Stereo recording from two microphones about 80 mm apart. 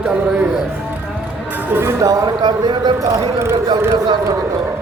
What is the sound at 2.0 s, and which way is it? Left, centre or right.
Speech, right.